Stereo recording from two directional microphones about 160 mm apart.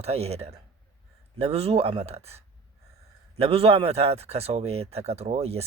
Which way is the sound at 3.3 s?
40° right (ahead or behind).